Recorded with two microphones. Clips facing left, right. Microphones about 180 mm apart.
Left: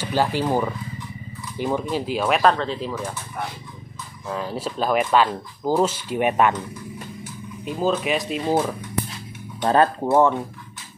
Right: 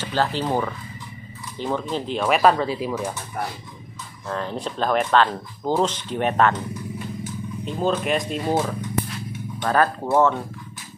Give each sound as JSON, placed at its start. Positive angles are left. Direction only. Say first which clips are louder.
{"t": 0.0, "sound": "speech", "louder": "left 2 dB", "side_deg": 10}
{"t": 4.3, "sound": "speech", "louder": "even", "side_deg": 5}
{"t": 7.6, "sound": "speech", "louder": "left 1 dB", "side_deg": 5}
{"t": 9.6, "sound": "speech", "louder": "left 2 dB", "side_deg": 25}